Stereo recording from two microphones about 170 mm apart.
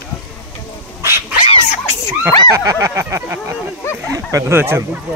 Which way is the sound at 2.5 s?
20° right (ahead or behind).